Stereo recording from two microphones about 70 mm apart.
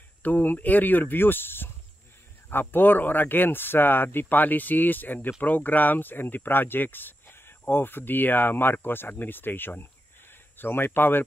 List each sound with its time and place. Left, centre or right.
0.2 s speech: left